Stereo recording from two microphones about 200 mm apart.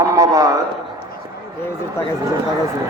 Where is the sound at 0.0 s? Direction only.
15° right (ahead or behind).